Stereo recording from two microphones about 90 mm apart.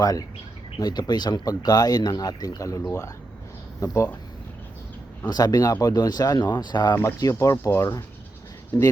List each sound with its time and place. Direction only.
0.0 s speech: 45° left (ahead or behind)
3.9 s speech: 20° left (ahead or behind)
5.2 s speech: 45° left (ahead or behind)
6.9 s speech: 40° left (ahead or behind)